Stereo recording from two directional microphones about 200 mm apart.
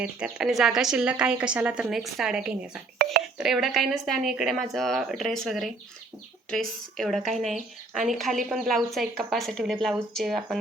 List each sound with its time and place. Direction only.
0.0 s a woman's voice: 5° right (ahead or behind)
3.0 s a sound: 50° right (ahead or behind)
3.3 s a woman's voice: centre (ahead or behind)